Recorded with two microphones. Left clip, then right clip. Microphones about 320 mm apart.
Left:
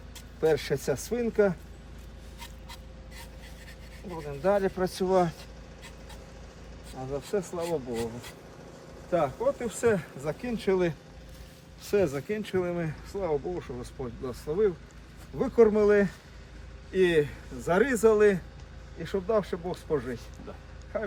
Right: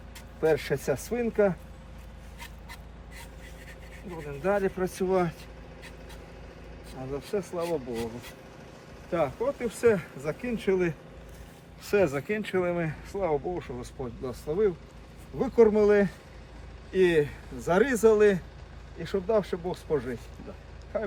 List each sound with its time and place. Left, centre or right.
0.4 s speech: centre
4.4 s speech: left
7.1 s speech: left
11.9 s speech: centre